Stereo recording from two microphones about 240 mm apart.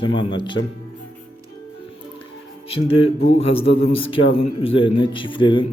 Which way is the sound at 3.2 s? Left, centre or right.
Left.